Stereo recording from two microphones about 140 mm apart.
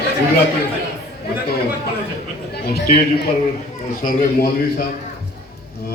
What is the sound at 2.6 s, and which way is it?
Speech, 90° left.